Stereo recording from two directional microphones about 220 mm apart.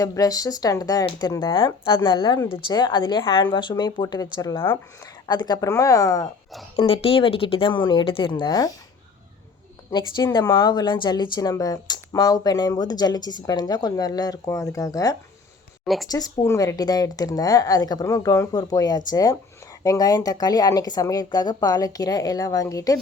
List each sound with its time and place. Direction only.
0.0 s speech: 15° left (ahead or behind)
6.7 s speech: 25° left (ahead or behind)
9.9 s speech: 20° left (ahead or behind)